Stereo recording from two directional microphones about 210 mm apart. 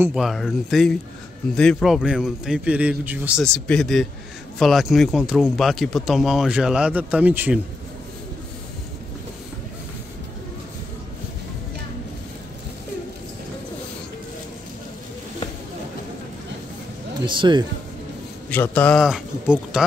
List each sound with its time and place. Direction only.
0.0 s speech: 5° right (ahead or behind)
17.2 s speech: 20° right (ahead or behind)
18.5 s speech: 10° left (ahead or behind)